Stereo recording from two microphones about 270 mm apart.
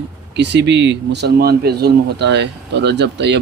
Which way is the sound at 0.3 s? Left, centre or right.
Right.